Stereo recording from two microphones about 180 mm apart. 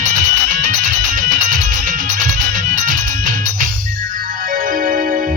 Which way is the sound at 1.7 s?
50° right (ahead or behind).